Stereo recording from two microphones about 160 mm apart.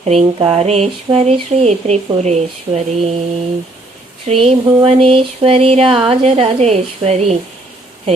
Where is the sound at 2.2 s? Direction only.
45° right (ahead or behind).